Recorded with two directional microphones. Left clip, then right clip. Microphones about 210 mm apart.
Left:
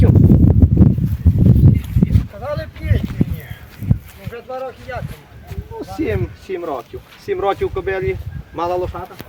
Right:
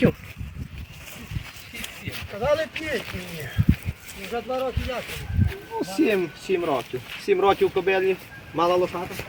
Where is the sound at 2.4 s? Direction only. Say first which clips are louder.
Right 5 dB; 45° right (ahead or behind).